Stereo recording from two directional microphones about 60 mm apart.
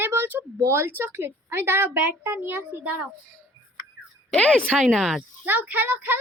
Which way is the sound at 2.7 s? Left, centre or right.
Right.